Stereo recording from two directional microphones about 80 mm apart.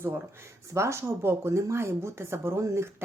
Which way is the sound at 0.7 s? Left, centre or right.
Right.